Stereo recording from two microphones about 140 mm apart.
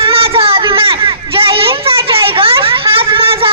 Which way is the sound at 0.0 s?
40° right (ahead or behind).